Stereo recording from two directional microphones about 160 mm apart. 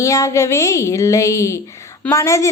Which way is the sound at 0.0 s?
20° left (ahead or behind).